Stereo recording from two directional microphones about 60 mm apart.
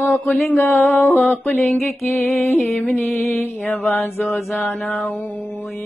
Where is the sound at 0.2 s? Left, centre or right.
Left.